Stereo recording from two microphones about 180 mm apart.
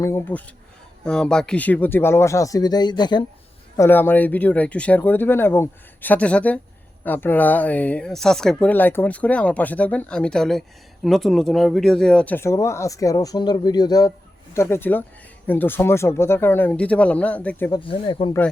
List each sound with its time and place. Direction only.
0.0 s speech: 15° left (ahead or behind)
3.8 s speech: 10° left (ahead or behind)
17.7 s speech: 30° left (ahead or behind)